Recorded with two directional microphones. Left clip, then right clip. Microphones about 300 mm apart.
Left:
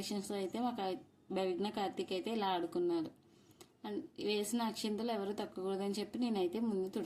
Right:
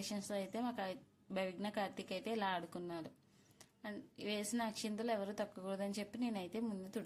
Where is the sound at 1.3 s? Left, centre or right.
Right.